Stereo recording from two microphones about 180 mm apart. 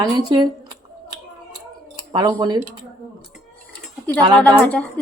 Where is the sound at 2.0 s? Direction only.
20° right (ahead or behind).